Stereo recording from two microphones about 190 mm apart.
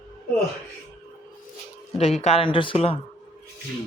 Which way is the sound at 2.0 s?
35° left (ahead or behind).